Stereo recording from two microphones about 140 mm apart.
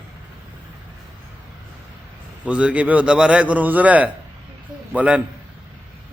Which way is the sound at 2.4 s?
10° right (ahead or behind).